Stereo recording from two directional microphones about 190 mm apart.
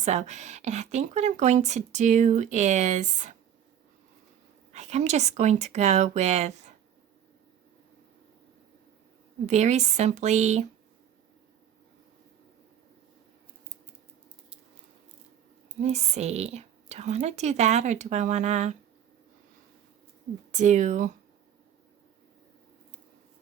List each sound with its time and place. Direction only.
0.0 s speech: 35° right (ahead or behind)
4.7 s speech: 35° right (ahead or behind)
9.5 s speech: 35° right (ahead or behind)
15.8 s speech: 35° right (ahead or behind)
20.5 s speech: 40° right (ahead or behind)